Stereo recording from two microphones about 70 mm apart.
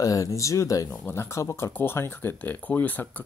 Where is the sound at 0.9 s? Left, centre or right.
Left.